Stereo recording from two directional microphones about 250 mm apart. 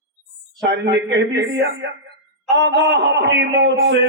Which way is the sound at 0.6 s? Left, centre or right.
Right.